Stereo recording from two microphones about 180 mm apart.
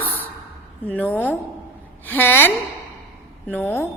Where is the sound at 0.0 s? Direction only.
10° left (ahead or behind).